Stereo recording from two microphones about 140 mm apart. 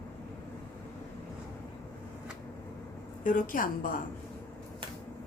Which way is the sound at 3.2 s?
75° left (ahead or behind).